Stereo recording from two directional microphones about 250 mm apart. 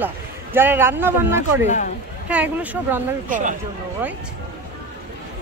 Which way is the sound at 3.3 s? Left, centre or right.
Right.